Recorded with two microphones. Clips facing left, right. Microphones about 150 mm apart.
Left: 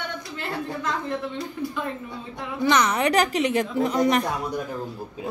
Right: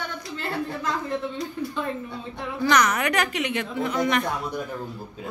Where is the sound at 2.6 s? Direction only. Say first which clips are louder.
Left 1 dB; 25° left (ahead or behind).